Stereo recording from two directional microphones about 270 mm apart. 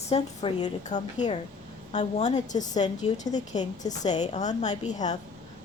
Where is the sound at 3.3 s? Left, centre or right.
Centre.